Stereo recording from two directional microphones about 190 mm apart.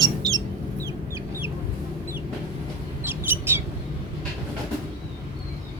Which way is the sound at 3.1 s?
10° right (ahead or behind).